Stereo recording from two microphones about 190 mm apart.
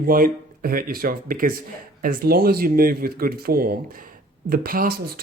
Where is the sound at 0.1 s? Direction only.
50° right (ahead or behind).